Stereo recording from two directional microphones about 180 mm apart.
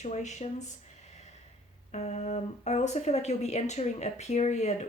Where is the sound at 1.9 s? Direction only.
40° left (ahead or behind).